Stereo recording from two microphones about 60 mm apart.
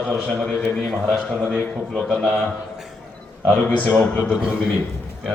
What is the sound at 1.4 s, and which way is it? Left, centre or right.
Speech, left.